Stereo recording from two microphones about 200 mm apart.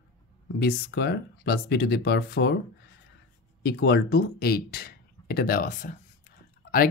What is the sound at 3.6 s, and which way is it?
Speech, 55° left (ahead or behind).